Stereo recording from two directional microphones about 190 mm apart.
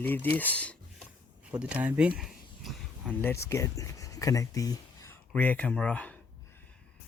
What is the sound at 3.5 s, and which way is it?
Speech, 15° left (ahead or behind).